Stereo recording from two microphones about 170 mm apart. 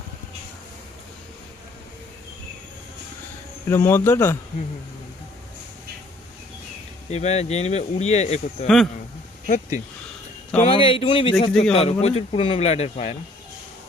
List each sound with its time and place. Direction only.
3.7 s speech: 15° left (ahead or behind)
7.1 s speech: 40° left (ahead or behind)
8.6 s speech: 5° left (ahead or behind)
9.5 s speech: 45° left (ahead or behind)
10.6 s speech: 30° left (ahead or behind)